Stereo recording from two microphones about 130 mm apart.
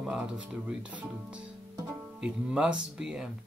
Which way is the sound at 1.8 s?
10° right (ahead or behind).